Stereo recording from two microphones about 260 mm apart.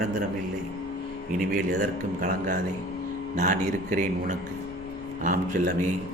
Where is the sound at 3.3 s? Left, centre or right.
Right.